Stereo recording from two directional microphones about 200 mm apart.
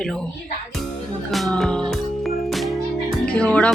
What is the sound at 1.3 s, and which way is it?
Music, centre (ahead or behind).